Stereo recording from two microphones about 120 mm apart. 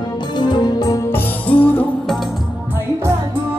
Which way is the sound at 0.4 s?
40° left (ahead or behind).